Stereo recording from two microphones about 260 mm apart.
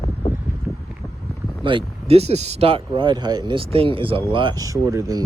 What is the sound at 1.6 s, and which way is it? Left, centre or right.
Speech, right.